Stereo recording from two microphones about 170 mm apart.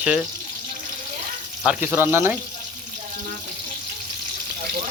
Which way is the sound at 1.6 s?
Centre (ahead or behind).